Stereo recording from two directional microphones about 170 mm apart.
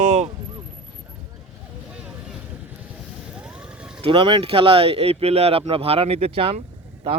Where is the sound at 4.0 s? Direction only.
30° right (ahead or behind).